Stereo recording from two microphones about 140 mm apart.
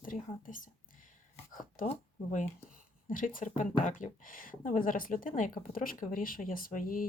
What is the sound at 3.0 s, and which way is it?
Speech, 70° left (ahead or behind).